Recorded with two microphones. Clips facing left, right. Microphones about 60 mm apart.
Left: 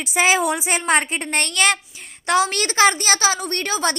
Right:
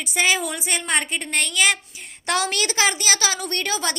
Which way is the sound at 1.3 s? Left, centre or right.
Centre.